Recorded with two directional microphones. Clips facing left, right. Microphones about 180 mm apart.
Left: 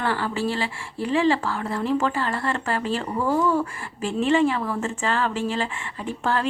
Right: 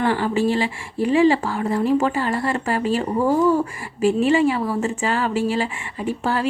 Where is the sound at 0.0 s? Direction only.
15° right (ahead or behind).